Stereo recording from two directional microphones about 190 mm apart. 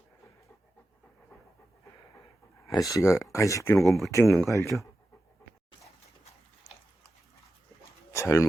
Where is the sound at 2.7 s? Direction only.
20° left (ahead or behind).